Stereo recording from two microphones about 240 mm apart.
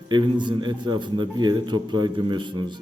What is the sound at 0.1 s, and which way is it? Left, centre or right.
A man's voice, centre.